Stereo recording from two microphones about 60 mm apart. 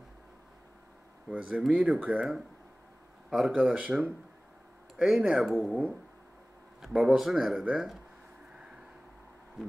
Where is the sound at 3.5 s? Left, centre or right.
Right.